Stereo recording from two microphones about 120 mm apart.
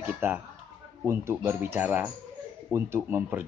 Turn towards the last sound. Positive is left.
turn(degrees=-15)  # may be behind; listen again after turning